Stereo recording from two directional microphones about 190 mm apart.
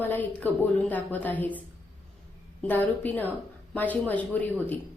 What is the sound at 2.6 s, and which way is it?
A woman's voice, 10° left (ahead or behind).